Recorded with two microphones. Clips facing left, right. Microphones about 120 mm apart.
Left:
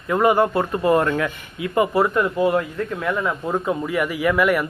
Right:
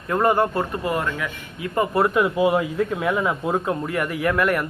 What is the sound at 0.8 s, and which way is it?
Speech, 25° left (ahead or behind).